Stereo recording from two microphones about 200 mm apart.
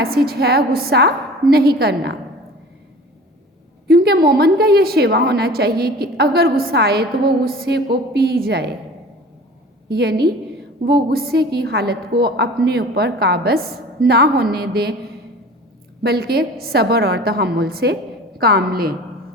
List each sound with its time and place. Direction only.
0.0 s a woman's voice: 50° right (ahead or behind)
3.8 s a woman's voice: 55° right (ahead or behind)
9.9 s a woman's voice: 50° right (ahead or behind)
16.0 s a woman's voice: 50° right (ahead or behind)